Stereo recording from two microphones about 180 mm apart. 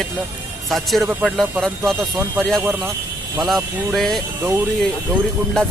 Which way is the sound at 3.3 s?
Centre (ahead or behind).